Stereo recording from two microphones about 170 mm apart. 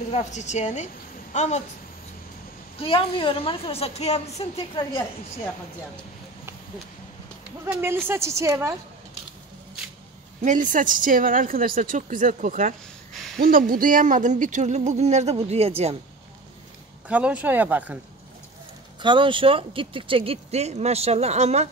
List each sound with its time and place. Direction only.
0.1 s a woman's voice: 45° left (ahead or behind)
2.8 s a woman's voice: 35° left (ahead or behind)
7.6 s a woman's voice: 15° right (ahead or behind)
10.4 s speech: 50° right (ahead or behind)
17.1 s a woman's voice: 5° right (ahead or behind)
18.9 s speech: 30° right (ahead or behind)